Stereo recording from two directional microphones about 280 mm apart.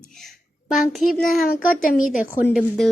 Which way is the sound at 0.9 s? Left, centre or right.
Centre.